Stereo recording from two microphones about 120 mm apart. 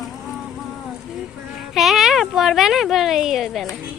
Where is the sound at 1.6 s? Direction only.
Centre (ahead or behind).